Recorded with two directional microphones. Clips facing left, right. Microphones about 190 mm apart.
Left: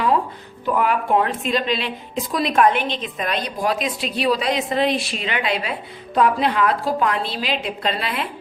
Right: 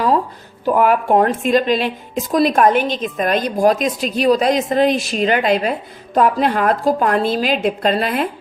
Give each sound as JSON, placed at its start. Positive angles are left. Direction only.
{"t": 0.6, "sound": "a woman's voice", "side_deg": -45}